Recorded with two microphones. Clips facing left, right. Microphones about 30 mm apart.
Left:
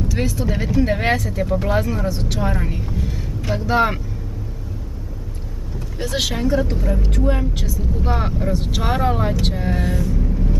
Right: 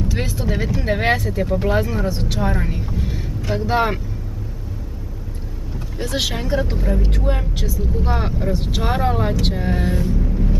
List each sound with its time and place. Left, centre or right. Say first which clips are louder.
0.1 s speech: left 2 dB; centre
0.5 s speech: left 1 dB; centre
5.9 s speech: left 1 dB; centre
10.1 s music: right 1 dB; centre